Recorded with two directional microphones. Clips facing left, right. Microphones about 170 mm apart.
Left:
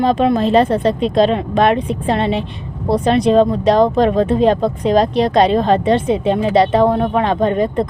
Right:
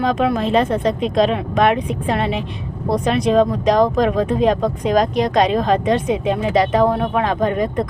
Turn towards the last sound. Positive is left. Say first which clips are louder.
# left 3 dB
turn(degrees=25)  # may be behind; listen again after turning